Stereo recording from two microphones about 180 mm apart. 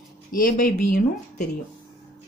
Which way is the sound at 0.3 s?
50° left (ahead or behind).